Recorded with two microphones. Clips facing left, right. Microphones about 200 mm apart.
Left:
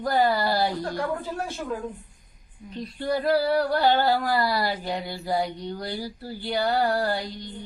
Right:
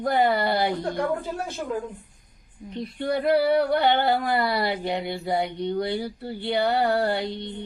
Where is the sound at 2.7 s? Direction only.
25° right (ahead or behind).